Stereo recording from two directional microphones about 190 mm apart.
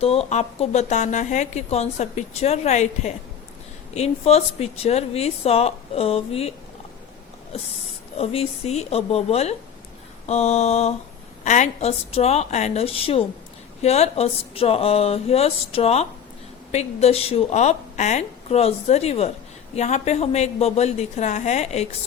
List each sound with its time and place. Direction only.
0.0 s a woman's voice: 30° left (ahead or behind)
8.1 s a woman's voice: 30° left (ahead or behind)